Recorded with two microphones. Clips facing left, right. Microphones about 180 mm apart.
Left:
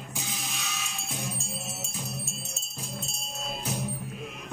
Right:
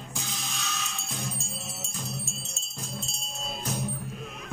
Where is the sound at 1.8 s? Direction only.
10° left (ahead or behind).